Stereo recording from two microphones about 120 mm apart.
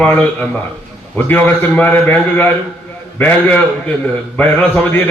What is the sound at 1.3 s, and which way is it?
A man's voice, 15° left (ahead or behind).